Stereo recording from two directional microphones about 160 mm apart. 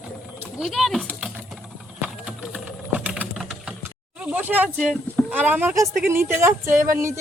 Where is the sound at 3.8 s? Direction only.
10° right (ahead or behind).